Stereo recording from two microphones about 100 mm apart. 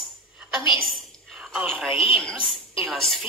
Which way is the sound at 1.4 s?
10° right (ahead or behind).